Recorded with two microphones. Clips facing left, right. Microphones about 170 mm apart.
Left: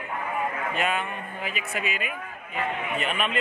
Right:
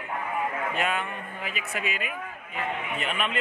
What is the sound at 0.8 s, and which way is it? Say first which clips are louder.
Speech: left 3 dB; 15° left (ahead or behind).